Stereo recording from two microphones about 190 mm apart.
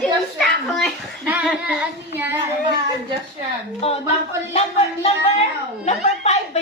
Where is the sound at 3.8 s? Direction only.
30° left (ahead or behind).